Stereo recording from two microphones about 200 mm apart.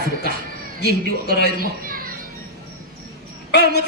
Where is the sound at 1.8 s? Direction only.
45° right (ahead or behind).